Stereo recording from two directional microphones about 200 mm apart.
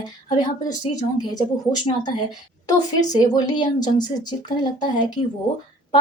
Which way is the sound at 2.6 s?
20° left (ahead or behind).